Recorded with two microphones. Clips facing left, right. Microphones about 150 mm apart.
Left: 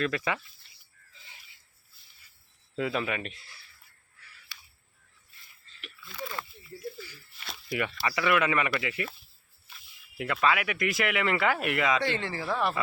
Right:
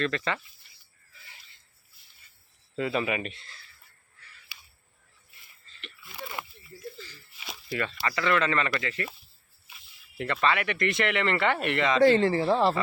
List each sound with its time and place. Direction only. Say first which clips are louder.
0.0 s speech: even; 10° left (ahead or behind)
2.7 s speech: right 2 dB; centre (ahead or behind)
4.5 s a sound: left 1 dB; 10° right (ahead or behind)
6.1 s speech: left 2 dB; 25° right (ahead or behind)
6.9 s a sound: left 2 dB; 10° left (ahead or behind)
7.7 s speech: even; 15° left (ahead or behind)
10.2 s speech: even; 5° left (ahead or behind)
12.0 s speech: right 10 dB; 35° right (ahead or behind)